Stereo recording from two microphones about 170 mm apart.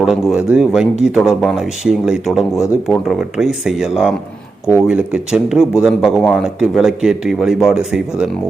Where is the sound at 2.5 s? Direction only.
15° left (ahead or behind).